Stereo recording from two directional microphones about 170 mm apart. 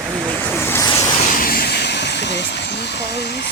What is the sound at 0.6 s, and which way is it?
Vehicle, 15° left (ahead or behind).